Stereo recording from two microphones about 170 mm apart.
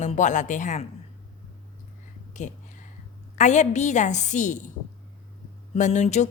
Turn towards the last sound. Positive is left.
turn(degrees=40)  # may be behind; listen again after turning